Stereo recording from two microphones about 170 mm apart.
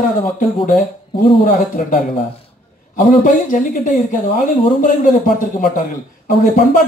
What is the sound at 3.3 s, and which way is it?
Speech, 50° left (ahead or behind).